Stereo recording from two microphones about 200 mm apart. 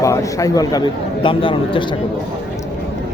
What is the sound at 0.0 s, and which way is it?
A man's voice, 15° left (ahead or behind).